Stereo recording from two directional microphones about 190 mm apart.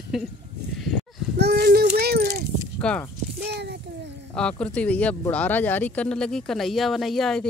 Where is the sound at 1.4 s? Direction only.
60° right (ahead or behind).